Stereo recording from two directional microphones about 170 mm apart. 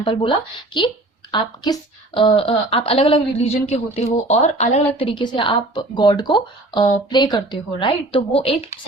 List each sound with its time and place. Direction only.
0.0 s a woman's voice: 30° left (ahead or behind)